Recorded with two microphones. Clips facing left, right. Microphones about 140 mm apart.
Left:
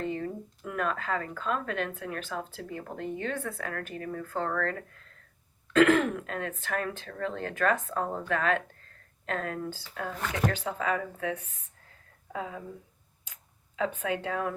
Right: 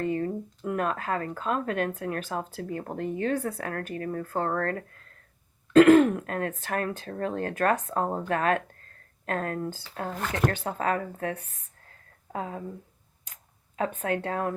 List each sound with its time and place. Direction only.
0.0 s speech: 50° right (ahead or behind)
13.7 s speech: 45° right (ahead or behind)